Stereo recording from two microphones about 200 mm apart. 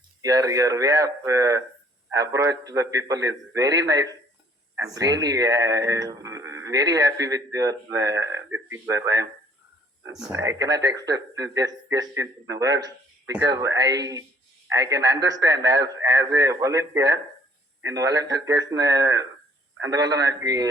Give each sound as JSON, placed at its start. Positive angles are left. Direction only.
{"t": 0.2, "sound": "speech", "side_deg": -15}
{"t": 10.3, "sound": "speech", "side_deg": -15}